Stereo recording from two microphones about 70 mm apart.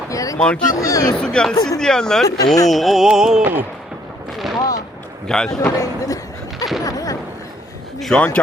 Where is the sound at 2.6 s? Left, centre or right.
Centre.